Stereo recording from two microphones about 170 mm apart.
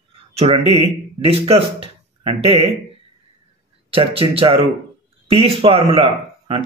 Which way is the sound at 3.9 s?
35° right (ahead or behind).